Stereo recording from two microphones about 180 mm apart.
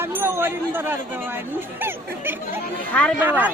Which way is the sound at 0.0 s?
15° right (ahead or behind).